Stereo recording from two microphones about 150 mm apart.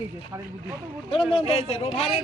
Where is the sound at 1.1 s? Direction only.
40° left (ahead or behind).